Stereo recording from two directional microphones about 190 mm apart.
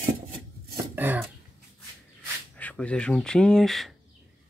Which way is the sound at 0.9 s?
10° right (ahead or behind).